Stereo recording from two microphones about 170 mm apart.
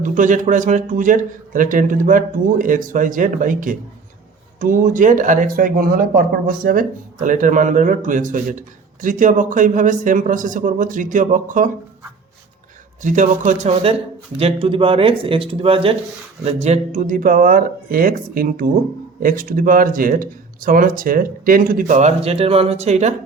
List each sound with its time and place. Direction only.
0.0 s speech: 50° right (ahead or behind)
13.0 s speech: 50° right (ahead or behind)